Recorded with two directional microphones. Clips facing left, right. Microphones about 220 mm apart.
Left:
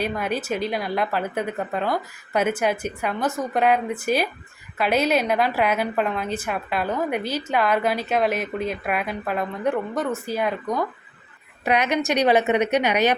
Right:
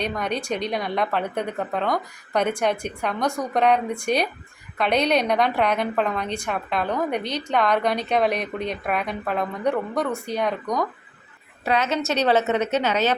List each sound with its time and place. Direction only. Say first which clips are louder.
0.0 s a woman's voice: left 1 dB; 5° left (ahead or behind)
11.6 s a woman's voice: left 1 dB; 15° left (ahead or behind)